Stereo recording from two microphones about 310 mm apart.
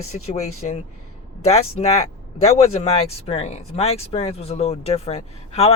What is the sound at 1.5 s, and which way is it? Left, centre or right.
Speech, left.